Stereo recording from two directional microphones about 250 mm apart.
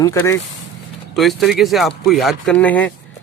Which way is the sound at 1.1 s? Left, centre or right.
Centre.